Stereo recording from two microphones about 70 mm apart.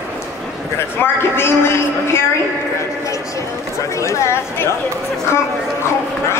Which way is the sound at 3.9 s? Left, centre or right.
Left.